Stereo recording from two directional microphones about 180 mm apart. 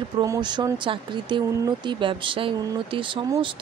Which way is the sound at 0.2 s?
20° right (ahead or behind).